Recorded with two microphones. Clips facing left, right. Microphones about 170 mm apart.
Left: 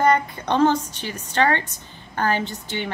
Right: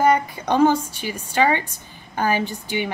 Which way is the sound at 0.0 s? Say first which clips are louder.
Right 1 dB; 10° right (ahead or behind).